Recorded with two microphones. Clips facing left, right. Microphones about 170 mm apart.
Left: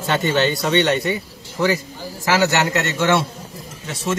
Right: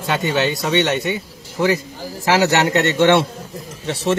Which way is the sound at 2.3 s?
30° right (ahead or behind).